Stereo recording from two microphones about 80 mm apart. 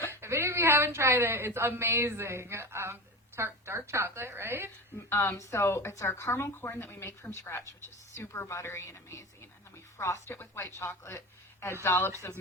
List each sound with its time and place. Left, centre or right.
0.1 s speech: right
5.0 s speech: left